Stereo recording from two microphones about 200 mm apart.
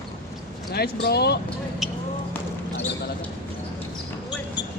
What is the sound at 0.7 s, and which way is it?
Speech, 55° left (ahead or behind).